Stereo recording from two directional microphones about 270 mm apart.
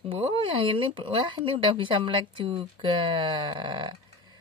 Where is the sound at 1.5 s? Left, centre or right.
Centre.